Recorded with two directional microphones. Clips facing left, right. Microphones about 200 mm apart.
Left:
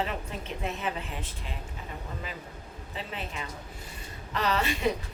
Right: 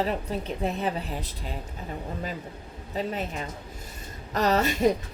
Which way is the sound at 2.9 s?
40° right (ahead or behind).